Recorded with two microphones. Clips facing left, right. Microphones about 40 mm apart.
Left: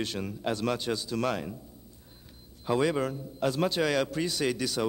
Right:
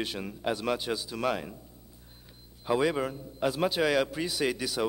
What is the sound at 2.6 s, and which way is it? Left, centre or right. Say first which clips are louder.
A man's voice: even; centre.